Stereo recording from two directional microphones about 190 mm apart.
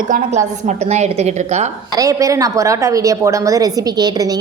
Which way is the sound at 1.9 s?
20° right (ahead or behind).